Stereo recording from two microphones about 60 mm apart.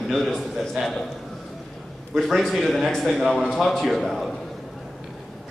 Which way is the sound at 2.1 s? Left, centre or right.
Centre.